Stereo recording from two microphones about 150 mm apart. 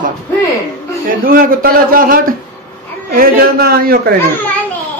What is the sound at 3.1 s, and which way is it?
A man's voice, 85° right.